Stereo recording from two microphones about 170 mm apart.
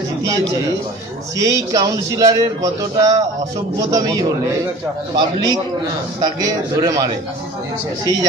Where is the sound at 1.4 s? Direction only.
20° right (ahead or behind).